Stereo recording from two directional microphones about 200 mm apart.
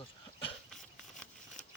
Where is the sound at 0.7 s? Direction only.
5° left (ahead or behind).